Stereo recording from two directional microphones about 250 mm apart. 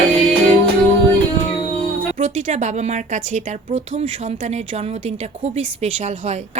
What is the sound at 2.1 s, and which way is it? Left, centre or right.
A woman's voice, right.